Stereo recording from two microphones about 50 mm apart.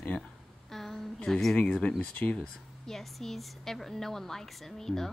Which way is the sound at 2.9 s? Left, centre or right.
Centre.